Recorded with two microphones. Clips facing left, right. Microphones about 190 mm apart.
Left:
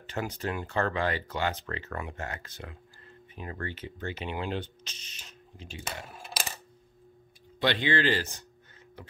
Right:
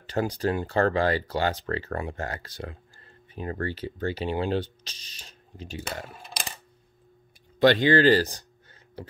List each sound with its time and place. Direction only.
0.0 s speech: 35° right (ahead or behind)
7.6 s speech: 40° right (ahead or behind)